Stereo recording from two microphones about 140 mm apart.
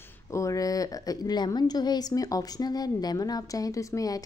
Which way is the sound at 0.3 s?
20° left (ahead or behind).